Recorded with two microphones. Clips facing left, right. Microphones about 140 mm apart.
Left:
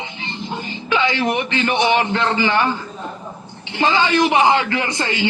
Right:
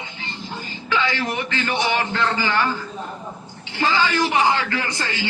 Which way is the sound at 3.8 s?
20° left (ahead or behind).